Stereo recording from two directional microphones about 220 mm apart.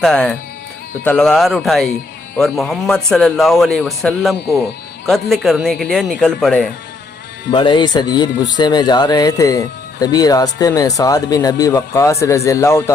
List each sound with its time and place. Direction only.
0.0 s speech: 5° left (ahead or behind)
7.5 s speech: 20° left (ahead or behind)